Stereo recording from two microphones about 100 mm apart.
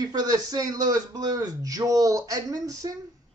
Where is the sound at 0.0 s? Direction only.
40° right (ahead or behind).